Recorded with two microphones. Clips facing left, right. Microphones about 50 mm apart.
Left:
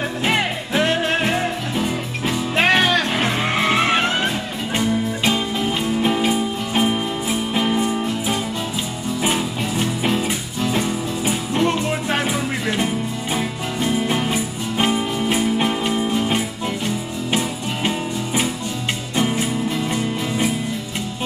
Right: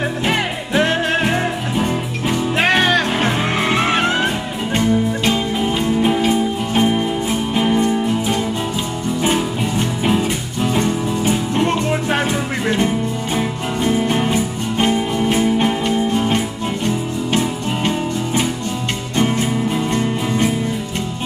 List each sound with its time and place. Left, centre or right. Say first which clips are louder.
0.2 s music: right 1 dB; centre
11.5 s music: right 2 dB; centre
19.9 s music: right 4 dB; centre